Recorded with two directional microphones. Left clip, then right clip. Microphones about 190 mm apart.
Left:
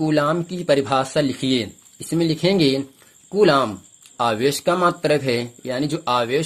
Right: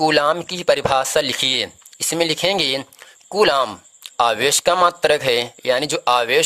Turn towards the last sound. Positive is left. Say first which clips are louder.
# right 4 dB
turn(degrees=-40)  # may be behind; listen again after turning